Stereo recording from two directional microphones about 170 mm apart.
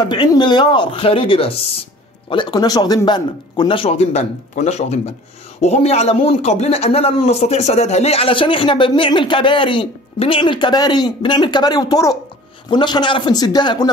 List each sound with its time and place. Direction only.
0.1 s a man's voice: 25° left (ahead or behind)